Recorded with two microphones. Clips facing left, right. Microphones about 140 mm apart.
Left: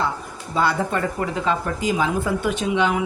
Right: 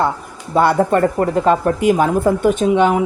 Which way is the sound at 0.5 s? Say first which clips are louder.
Right 8 dB; 55° right (ahead or behind).